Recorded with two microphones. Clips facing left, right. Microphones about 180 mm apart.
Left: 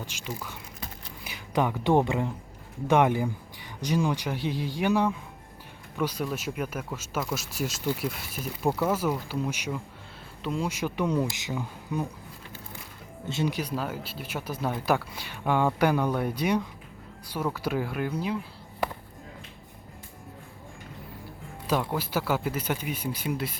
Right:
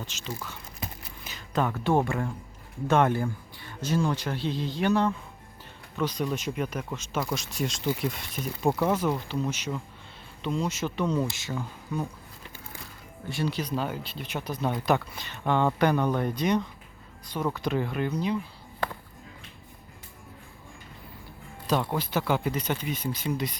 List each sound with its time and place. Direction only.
0.0 s speech: 10° left (ahead or behind)
13.2 s speech: 20° left (ahead or behind)
21.7 s speech: 5° left (ahead or behind)